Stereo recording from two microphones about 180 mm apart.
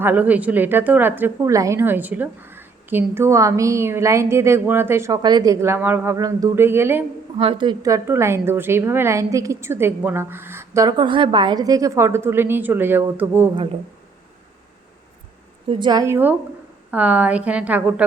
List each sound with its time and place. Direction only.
0.0 s a woman's voice: 10° right (ahead or behind)
7.3 s a woman's voice: 30° right (ahead or behind); by 13.5 s 10° right (ahead or behind)
15.7 s a woman's voice: 25° right (ahead or behind); by 18.0 s 10° right (ahead or behind)